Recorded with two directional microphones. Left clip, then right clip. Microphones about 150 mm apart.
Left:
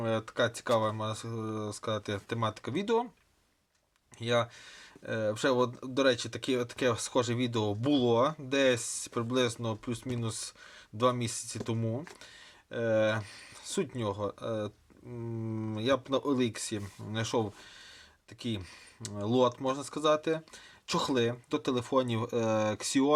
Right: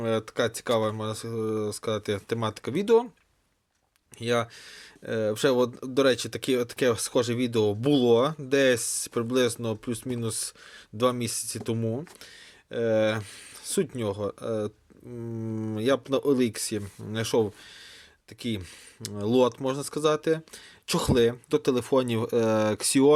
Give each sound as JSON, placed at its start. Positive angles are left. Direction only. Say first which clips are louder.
{"t": 0.0, "sound": "speech", "louder": "right 3 dB", "side_deg": -30}
{"t": 4.2, "sound": "speech", "louder": "right 3 dB", "side_deg": -30}